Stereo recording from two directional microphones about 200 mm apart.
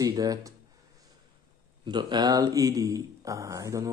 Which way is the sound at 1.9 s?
20° right (ahead or behind).